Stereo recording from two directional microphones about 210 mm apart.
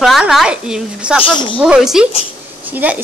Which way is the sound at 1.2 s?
25° left (ahead or behind).